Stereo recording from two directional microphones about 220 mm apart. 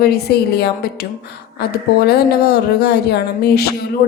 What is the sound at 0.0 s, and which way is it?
Music, 45° left (ahead or behind).